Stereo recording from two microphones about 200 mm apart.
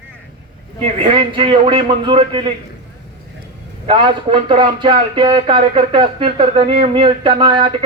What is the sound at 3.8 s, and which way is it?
Speech, 25° right (ahead or behind).